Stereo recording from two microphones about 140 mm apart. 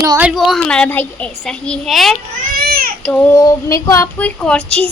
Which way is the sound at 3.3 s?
20° left (ahead or behind).